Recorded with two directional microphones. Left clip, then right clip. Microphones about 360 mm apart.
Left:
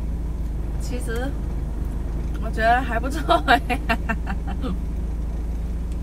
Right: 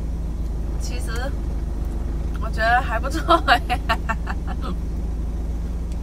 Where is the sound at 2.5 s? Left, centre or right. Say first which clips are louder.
Even; centre.